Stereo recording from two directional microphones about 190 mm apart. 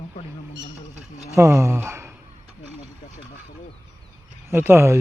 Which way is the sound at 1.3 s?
15° right (ahead or behind).